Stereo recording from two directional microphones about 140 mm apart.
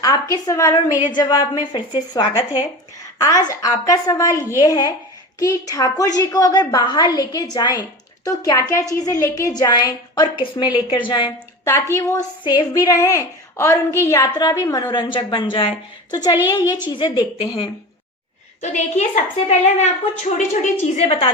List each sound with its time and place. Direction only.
0.0 s a woman's voice: 25° left (ahead or behind)
12.4 s a woman's voice: 30° left (ahead or behind)
18.6 s a woman's voice: 55° left (ahead or behind)